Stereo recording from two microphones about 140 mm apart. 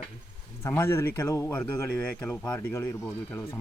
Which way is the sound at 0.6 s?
20° left (ahead or behind).